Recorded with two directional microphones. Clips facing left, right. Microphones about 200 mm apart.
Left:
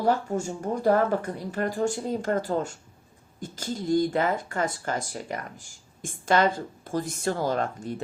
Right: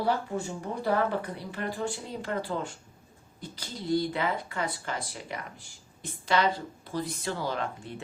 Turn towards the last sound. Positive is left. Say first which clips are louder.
# left 6 dB
turn(degrees=40)  # may be behind; listen again after turning